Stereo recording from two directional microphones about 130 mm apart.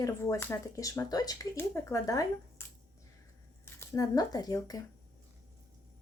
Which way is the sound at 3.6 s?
25° left (ahead or behind).